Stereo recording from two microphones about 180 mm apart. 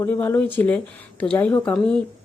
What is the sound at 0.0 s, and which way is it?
Speech, 10° left (ahead or behind).